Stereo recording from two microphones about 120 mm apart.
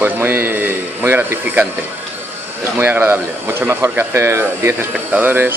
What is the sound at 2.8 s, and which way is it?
Speech, 15° right (ahead or behind).